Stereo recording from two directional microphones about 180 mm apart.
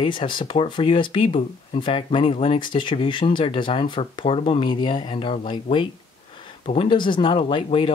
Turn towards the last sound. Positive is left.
turn(degrees=30)  # may be behind; listen again after turning